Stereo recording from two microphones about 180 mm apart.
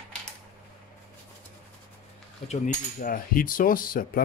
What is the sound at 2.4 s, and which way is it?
Speech, 45° left (ahead or behind).